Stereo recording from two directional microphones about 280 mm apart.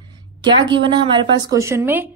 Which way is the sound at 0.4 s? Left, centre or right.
Centre.